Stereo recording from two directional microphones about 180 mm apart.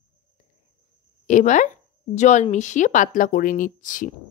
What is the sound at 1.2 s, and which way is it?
Speech, 45° left (ahead or behind).